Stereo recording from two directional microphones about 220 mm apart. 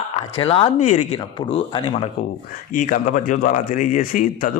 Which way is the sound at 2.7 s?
35° left (ahead or behind).